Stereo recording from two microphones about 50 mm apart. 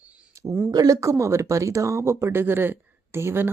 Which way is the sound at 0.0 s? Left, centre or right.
Right.